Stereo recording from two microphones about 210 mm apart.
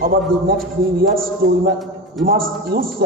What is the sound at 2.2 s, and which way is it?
Speech, 45° right (ahead or behind).